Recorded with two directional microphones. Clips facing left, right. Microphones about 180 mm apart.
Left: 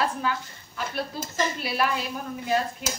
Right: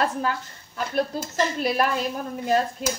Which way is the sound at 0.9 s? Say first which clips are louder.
Right 6 dB; 45° right (ahead or behind).